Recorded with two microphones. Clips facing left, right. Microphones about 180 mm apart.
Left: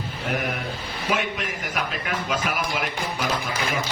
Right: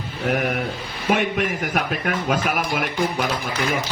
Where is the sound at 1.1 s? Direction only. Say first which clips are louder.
Right 6 dB; 55° right (ahead or behind).